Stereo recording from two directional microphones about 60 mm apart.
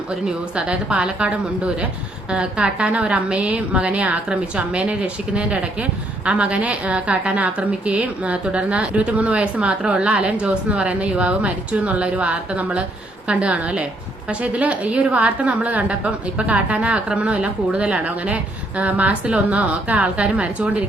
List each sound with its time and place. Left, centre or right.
0.3 s a woman's voice: centre